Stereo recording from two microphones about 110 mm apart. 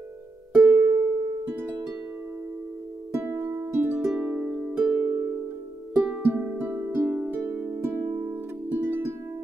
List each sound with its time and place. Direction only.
0.6 s music: 15° right (ahead or behind)
3.1 s music: 20° right (ahead or behind)